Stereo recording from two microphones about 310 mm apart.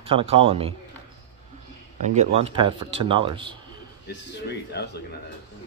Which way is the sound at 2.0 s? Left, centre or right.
Right.